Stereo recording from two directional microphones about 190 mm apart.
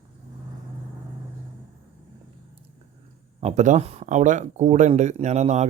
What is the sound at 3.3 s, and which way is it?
Speech, 35° right (ahead or behind).